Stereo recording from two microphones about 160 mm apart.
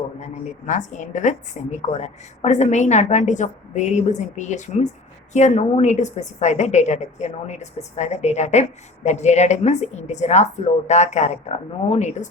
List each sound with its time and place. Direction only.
0.7 s a woman's voice: 50° left (ahead or behind)